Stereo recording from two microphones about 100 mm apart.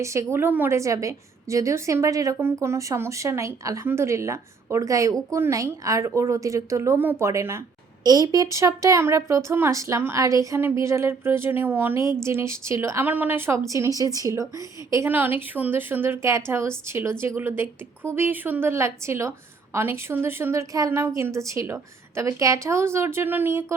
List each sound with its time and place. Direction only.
0.0 s a woman's voice: 30° right (ahead or behind)
0.8 s a woman's voice: 35° right (ahead or behind)
8.0 s a woman's voice: 40° right (ahead or behind)
13.1 s a woman's voice: 20° right (ahead or behind)